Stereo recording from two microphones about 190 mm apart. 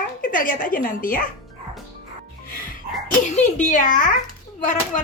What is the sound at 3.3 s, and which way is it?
Speech, 40° left (ahead or behind).